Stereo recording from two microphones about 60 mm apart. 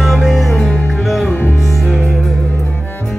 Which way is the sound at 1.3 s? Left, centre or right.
Left.